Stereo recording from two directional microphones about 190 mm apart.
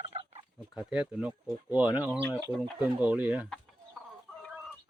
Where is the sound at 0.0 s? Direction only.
30° right (ahead or behind).